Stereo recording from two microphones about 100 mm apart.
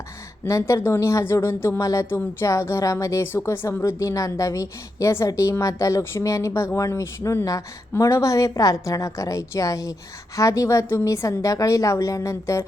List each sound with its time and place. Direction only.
0.4 s speech: 30° left (ahead or behind)